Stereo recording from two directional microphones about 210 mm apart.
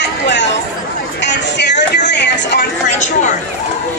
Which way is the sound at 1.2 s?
55° left (ahead or behind).